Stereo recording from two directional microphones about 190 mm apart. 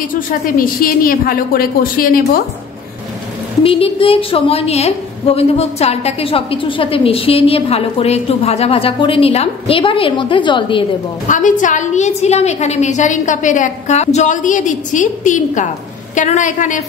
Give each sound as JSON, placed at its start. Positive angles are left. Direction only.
{"t": 0.1, "sound": "a woman's voice", "side_deg": 50}
{"t": 3.6, "sound": "a woman's voice", "side_deg": 30}
{"t": 11.2, "sound": "a woman's voice", "side_deg": 40}